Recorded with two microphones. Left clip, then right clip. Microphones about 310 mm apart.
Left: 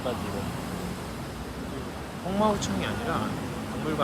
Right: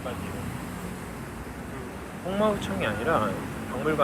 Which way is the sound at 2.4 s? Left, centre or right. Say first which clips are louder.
Even; centre.